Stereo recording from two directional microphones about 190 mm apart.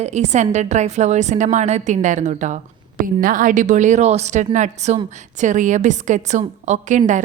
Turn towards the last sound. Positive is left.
turn(degrees=-40)  # may be behind; listen again after turning